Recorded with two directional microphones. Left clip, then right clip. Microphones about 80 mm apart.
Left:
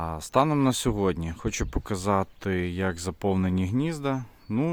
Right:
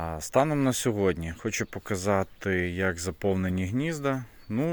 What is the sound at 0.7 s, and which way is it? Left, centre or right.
Speech, left.